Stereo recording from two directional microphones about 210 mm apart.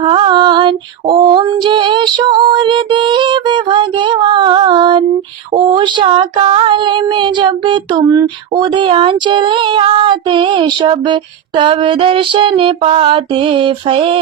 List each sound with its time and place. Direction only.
0.0 s female singing: 25° right (ahead or behind)
5.5 s child singing: 20° right (ahead or behind)